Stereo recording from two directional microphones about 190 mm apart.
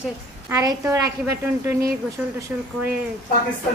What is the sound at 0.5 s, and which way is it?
Speech, 15° right (ahead or behind).